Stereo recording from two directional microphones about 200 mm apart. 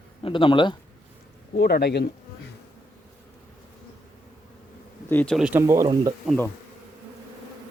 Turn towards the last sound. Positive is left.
turn(degrees=10)  # may be behind; listen again after turning